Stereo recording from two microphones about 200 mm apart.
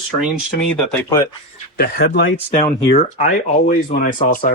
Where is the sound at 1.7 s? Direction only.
45° left (ahead or behind).